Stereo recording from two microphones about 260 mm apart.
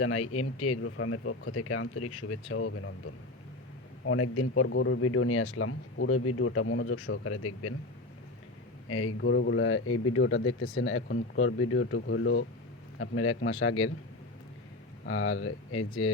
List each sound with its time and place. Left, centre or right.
0.0 s speech: left
4.0 s speech: left
8.9 s speech: left
9.1 s speech: left
15.0 s speech: left